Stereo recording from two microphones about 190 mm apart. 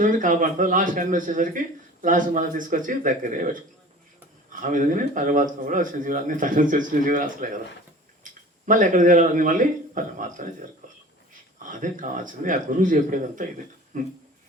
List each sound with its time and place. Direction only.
0.0 s speech: 45° right (ahead or behind)
4.6 s speech: 45° right (ahead or behind)
11.7 s speech: 45° right (ahead or behind)